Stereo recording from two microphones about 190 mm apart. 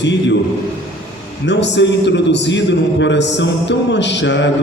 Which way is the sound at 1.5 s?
65° left (ahead or behind).